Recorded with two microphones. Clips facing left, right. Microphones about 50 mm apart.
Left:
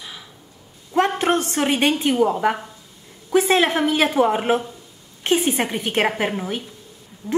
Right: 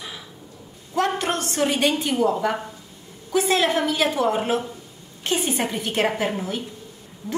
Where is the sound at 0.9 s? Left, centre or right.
Left.